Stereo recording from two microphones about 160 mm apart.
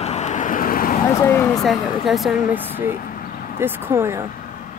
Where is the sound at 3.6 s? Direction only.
15° right (ahead or behind).